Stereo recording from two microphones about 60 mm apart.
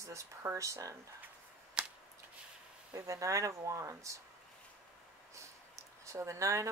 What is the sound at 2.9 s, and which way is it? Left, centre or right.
Speech, right.